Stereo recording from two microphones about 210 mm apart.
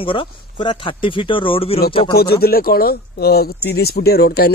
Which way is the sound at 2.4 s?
45° left (ahead or behind).